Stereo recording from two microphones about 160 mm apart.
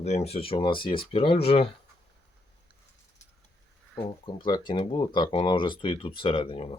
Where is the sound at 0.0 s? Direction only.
45° left (ahead or behind).